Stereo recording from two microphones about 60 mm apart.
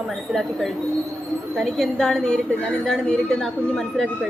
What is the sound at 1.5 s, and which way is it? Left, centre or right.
Speech, centre.